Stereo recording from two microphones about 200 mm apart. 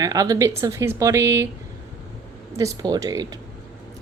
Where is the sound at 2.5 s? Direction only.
15° right (ahead or behind).